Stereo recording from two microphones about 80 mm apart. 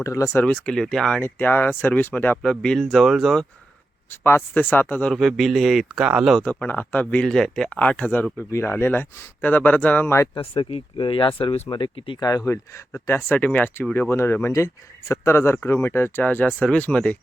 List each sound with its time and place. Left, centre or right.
0.0 s speech: left
0.4 s speech: centre
1.2 s speech: left
2.4 s speech: centre
4.1 s speech: left
5.1 s speech: centre
6.4 s speech: centre
10.3 s speech: left
12.2 s speech: left
12.9 s speech: left; by 17.2 s centre